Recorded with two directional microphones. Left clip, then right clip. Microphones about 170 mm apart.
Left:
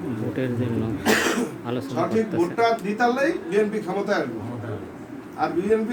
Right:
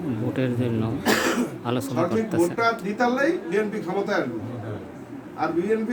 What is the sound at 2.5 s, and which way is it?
Speech, 5° right (ahead or behind).